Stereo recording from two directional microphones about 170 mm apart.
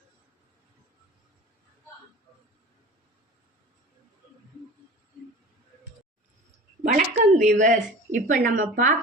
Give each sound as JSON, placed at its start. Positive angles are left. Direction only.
{"t": 6.8, "sound": "a woman's voice", "side_deg": -50}